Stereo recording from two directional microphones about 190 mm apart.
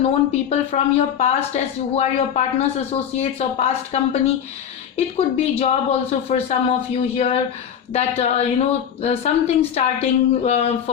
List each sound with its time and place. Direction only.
0.0 s speech: 35° left (ahead or behind)